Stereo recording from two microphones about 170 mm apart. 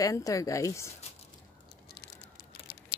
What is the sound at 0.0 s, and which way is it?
Speech, 20° left (ahead or behind).